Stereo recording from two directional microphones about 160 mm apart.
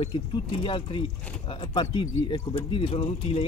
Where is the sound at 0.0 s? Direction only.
35° left (ahead or behind).